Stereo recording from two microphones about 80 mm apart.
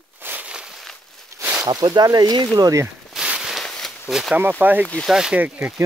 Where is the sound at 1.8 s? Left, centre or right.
Right.